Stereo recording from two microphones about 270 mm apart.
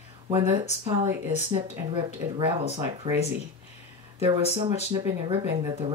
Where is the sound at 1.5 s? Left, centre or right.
Centre.